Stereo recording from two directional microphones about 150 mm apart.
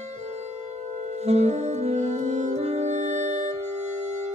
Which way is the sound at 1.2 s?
45° right (ahead or behind).